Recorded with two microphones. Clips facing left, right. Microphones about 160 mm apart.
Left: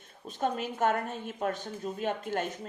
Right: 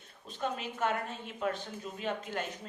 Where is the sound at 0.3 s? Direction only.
45° left (ahead or behind).